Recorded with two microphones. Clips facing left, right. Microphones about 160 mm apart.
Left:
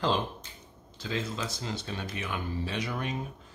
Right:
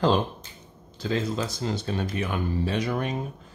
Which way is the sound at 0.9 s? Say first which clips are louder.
Right 7 dB; 40° right (ahead or behind).